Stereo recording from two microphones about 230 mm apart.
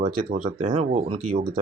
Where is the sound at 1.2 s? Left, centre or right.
Right.